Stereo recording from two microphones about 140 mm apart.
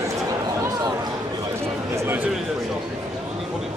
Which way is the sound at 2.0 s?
15° right (ahead or behind).